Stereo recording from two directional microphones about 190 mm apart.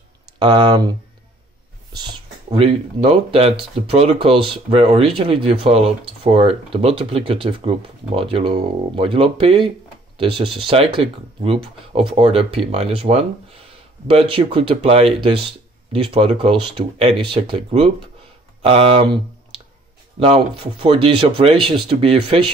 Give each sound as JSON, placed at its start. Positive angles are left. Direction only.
{"t": 0.4, "sound": "speech", "side_deg": -25}
{"t": 2.5, "sound": "speech", "side_deg": -30}
{"t": 20.2, "sound": "speech", "side_deg": -30}